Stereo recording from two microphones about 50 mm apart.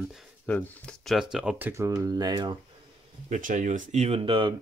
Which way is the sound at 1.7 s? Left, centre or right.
Right.